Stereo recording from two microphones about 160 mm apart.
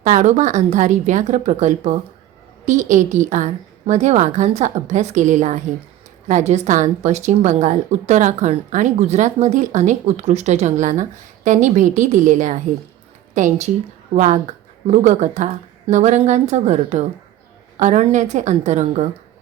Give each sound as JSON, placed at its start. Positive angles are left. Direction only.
{"t": 0.0, "sound": "a woman's voice", "side_deg": -50}